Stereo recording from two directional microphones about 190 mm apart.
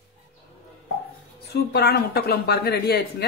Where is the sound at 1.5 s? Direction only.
60° left (ahead or behind).